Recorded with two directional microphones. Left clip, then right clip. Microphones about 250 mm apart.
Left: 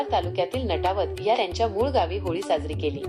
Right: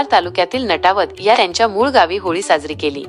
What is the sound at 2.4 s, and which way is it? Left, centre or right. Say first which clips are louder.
Speech: right 9 dB; right.